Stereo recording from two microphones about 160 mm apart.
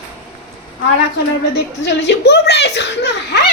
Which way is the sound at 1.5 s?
90° left.